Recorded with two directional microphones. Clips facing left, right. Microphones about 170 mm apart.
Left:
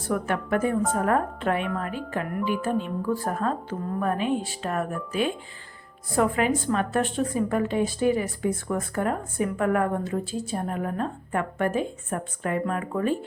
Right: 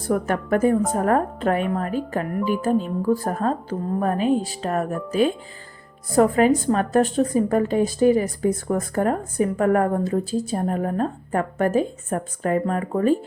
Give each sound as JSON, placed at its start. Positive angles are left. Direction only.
{"t": 0.1, "sound": "a woman's voice", "side_deg": -40}